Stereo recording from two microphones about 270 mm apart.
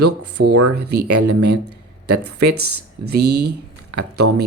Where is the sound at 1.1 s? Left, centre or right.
Right.